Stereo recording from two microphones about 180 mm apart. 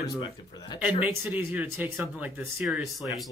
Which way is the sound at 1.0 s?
10° right (ahead or behind).